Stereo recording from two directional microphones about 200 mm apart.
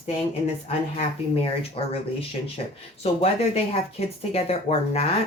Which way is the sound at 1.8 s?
25° left (ahead or behind).